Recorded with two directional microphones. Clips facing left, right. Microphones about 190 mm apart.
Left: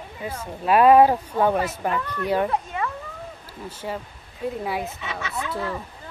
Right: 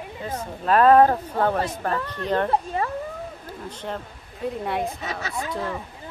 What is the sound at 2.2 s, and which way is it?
Speech, 10° left (ahead or behind).